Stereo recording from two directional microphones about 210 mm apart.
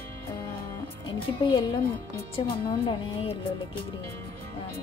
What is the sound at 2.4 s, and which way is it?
Speech, 20° left (ahead or behind).